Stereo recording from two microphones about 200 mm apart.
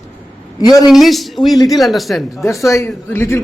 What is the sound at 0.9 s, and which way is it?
A man's voice, centre (ahead or behind).